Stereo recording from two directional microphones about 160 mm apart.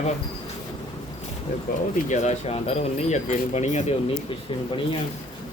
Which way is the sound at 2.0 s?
45° left (ahead or behind).